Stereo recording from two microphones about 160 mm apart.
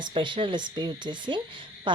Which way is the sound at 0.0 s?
30° right (ahead or behind).